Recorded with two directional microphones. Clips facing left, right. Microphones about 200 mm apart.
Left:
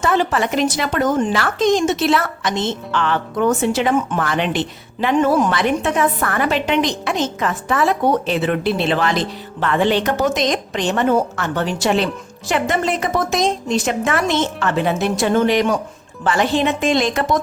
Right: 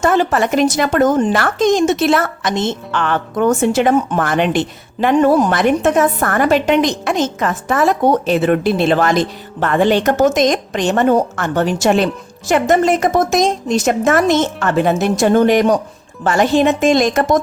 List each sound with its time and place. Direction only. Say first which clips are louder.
0.0 s speech: right 4 dB; 45° right (ahead or behind)